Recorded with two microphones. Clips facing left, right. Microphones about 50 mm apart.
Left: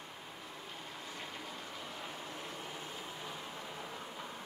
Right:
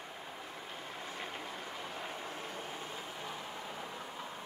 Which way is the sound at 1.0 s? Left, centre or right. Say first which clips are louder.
Right 3 dB; right.